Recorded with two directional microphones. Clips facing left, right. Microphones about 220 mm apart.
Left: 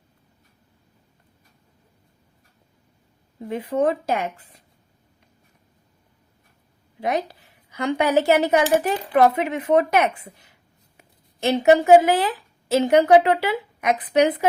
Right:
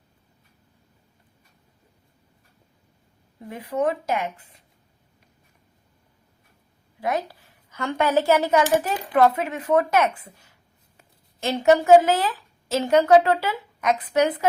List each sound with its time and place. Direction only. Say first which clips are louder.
3.5 s a woman's voice: left 3 dB; 25° left (ahead or behind)
7.0 s a woman's voice: left 2 dB; 20° left (ahead or behind)